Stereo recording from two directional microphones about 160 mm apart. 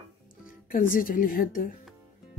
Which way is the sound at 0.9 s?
60° left (ahead or behind).